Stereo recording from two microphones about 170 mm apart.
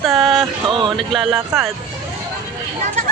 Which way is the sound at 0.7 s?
30° right (ahead or behind).